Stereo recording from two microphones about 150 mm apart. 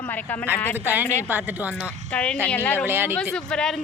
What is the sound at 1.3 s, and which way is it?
Speech, 10° right (ahead or behind).